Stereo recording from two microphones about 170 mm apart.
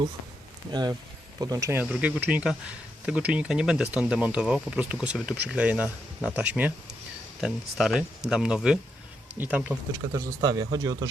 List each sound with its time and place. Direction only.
0.7 s speech: 25° right (ahead or behind)
1.8 s speech: 10° right (ahead or behind)
10.1 s speech: 20° right (ahead or behind)